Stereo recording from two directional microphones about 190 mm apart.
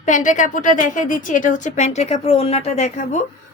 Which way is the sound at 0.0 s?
40° left (ahead or behind).